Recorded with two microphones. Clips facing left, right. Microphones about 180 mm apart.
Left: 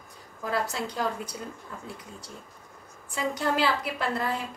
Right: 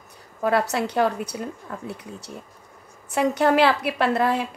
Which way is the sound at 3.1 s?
65° right (ahead or behind).